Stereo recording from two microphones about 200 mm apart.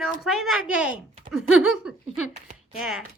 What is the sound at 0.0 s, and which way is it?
A woman's voice, centre (ahead or behind).